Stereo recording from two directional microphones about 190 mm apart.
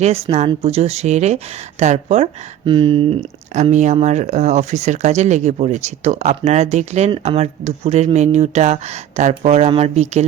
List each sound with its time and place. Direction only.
0.0 s speech: 35° right (ahead or behind)